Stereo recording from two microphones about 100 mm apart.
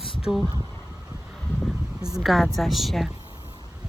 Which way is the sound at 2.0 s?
5° right (ahead or behind).